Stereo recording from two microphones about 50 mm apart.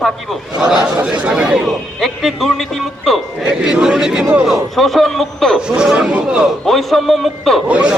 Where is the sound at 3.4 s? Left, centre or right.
Centre.